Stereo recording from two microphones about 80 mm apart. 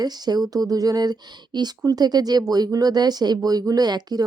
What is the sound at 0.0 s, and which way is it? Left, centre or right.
Speech, right.